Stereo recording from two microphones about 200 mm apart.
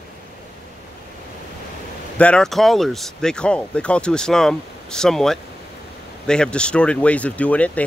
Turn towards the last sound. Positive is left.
turn(degrees=5)  # may be behind; listen again after turning